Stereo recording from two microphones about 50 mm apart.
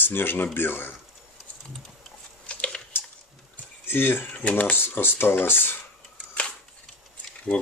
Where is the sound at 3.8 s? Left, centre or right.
Left.